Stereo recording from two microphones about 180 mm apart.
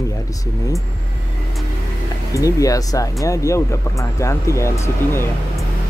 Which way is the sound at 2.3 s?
20° left (ahead or behind).